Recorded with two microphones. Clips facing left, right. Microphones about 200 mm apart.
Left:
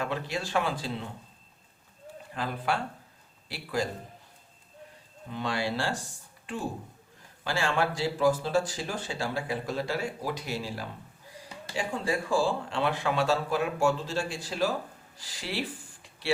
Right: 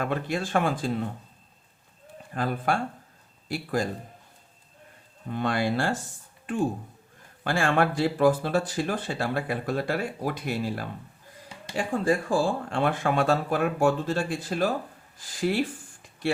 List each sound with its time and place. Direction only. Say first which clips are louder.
0.0 s speech: right 4 dB; 50° right (ahead or behind)
2.3 s speech: right 4 dB; 50° right (ahead or behind)
5.3 s speech: right 5 dB; 55° right (ahead or behind)
7.4 s speech: right 4 dB; 55° right (ahead or behind)